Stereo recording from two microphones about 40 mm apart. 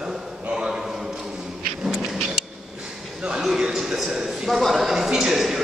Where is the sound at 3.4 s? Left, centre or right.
Centre.